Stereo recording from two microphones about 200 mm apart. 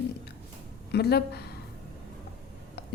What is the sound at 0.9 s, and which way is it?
Speech, 55° left (ahead or behind).